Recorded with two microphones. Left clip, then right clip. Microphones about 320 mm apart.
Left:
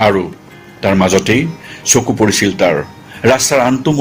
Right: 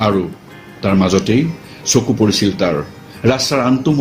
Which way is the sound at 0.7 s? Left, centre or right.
Left.